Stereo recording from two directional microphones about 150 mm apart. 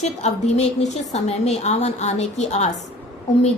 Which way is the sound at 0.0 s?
50° left (ahead or behind).